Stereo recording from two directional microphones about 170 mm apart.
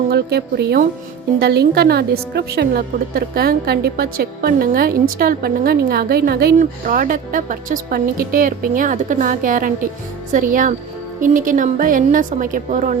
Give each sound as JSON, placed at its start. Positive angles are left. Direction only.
{"t": 0.1, "sound": "a woman's voice", "side_deg": -70}
{"t": 6.6, "sound": "a woman's voice", "side_deg": -55}